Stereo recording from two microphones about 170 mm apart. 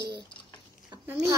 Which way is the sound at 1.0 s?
10° right (ahead or behind).